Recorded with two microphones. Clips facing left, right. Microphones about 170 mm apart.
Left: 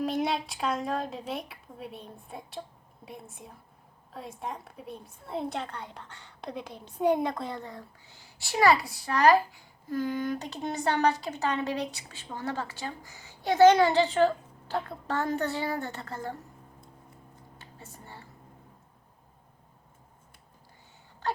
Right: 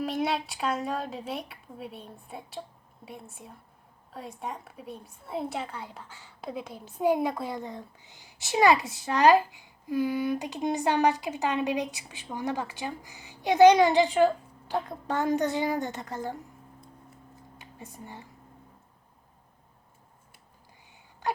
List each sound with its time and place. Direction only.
0.0 s a woman's voice: centre (ahead or behind); by 16.4 s 15° right (ahead or behind)
17.6 s speech: 15° right (ahead or behind)